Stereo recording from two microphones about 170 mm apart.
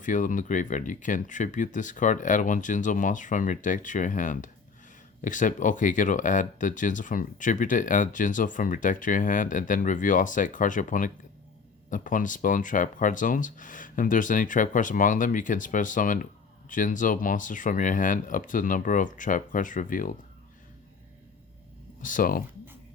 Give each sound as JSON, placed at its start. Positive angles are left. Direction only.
{"t": 0.0, "sound": "speech", "side_deg": 50}
{"t": 22.0, "sound": "speech", "side_deg": 55}